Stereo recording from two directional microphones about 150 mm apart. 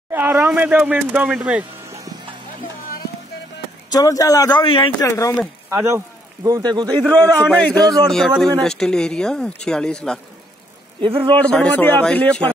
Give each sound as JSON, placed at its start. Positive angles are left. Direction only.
{"t": 0.1, "sound": "speech", "side_deg": -10}
{"t": 3.9, "sound": "a man's voice", "side_deg": 25}
{"t": 5.0, "sound": "a man's voice", "side_deg": 20}
{"t": 5.7, "sound": "a man's voice", "side_deg": -15}
{"t": 7.1, "sound": "a man's voice", "side_deg": 5}
{"t": 11.0, "sound": "a man's voice", "side_deg": -35}
{"t": 11.3, "sound": "a man's voice", "side_deg": 5}